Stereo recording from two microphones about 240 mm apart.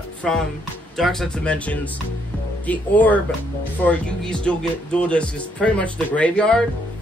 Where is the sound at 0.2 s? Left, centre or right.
Centre.